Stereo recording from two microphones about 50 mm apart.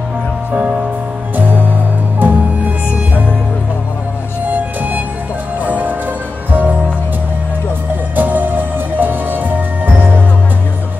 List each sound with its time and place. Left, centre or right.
1.3 s music: right
4.5 s music: right
8.2 s music: right